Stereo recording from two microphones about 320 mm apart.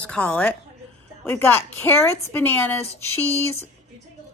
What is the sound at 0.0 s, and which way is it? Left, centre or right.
A woman's voice, centre.